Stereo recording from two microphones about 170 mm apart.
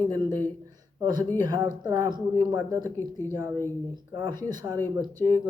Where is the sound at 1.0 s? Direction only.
25° right (ahead or behind).